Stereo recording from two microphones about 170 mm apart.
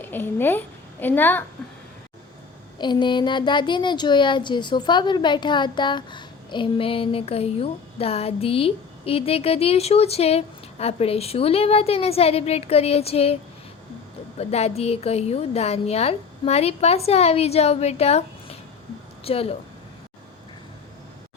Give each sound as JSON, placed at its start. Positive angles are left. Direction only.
{"t": 0.0, "sound": "a child's voice", "side_deg": 10}
{"t": 2.7, "sound": "speech", "side_deg": 25}